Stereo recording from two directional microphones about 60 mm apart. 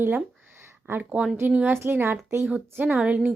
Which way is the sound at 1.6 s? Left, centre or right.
Right.